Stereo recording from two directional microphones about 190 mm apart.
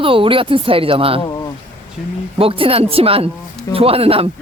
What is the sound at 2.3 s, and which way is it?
A man's voice, 30° right (ahead or behind).